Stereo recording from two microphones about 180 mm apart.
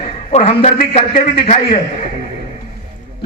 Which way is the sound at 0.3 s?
35° left (ahead or behind).